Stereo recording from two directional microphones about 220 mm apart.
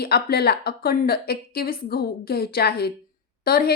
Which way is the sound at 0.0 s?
45° left (ahead or behind).